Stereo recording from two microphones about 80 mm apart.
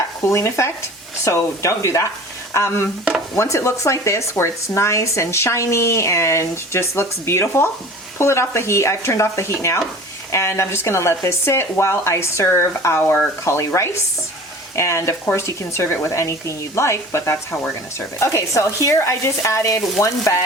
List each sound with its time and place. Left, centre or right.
0.3 s speech: left
13.4 s speech: left
14.8 s speech: left